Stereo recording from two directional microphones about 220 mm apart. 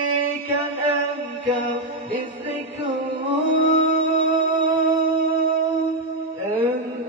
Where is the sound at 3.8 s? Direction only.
60° left (ahead or behind).